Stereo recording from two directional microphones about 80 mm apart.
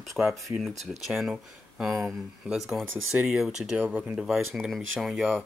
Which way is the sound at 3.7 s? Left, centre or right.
Right.